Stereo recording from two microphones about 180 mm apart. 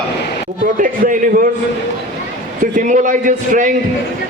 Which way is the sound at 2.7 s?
45° right (ahead or behind).